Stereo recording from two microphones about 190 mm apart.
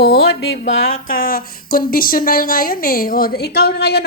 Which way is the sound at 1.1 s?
50° left (ahead or behind).